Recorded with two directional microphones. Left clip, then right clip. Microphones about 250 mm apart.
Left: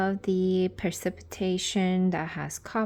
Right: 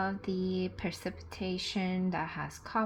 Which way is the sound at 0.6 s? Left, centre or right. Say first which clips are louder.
Left 8 dB; left.